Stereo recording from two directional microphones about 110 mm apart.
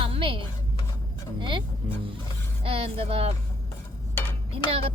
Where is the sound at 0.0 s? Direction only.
55° right (ahead or behind).